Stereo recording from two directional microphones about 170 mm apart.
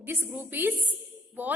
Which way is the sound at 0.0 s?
10° right (ahead or behind).